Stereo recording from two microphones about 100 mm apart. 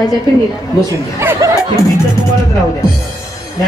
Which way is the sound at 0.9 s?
25° right (ahead or behind).